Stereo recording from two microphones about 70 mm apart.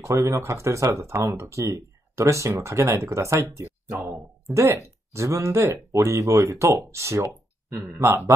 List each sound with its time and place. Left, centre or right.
0.0 s speech: right
3.9 s speech: right
4.5 s speech: centre
5.1 s speech: right